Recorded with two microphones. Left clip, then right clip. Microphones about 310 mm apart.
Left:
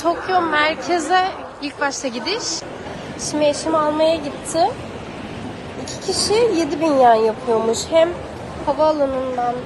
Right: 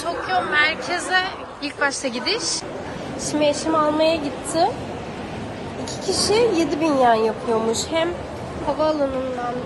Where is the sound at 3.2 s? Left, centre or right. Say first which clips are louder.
Left 2 dB; centre.